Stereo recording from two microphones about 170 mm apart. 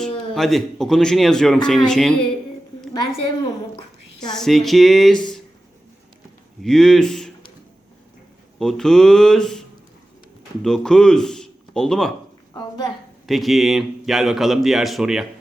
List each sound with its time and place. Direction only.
0.0 s speech: centre (ahead or behind)
4.4 s speech: centre (ahead or behind)
6.6 s a man's voice: centre (ahead or behind)
8.5 s speech: 5° left (ahead or behind)
12.5 s a sound: 25° left (ahead or behind)
13.2 s speech: centre (ahead or behind)